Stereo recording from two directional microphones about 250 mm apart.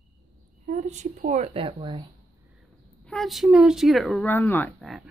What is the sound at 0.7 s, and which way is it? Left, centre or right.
Speech, right.